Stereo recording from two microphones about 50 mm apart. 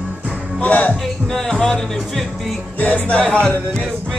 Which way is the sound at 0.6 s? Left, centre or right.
Left.